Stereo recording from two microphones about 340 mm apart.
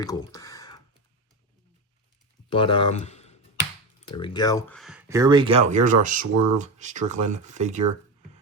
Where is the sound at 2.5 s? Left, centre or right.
Centre; by 7.8 s right.